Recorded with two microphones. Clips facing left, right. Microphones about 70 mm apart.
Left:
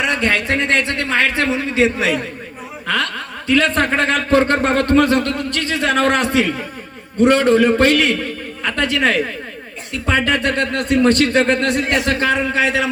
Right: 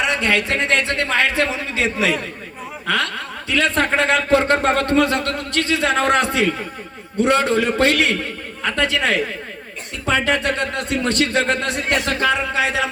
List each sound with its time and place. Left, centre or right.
0.0 s a man's voice: left